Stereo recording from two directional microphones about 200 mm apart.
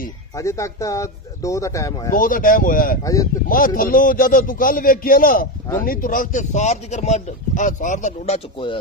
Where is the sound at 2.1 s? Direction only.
45° left (ahead or behind).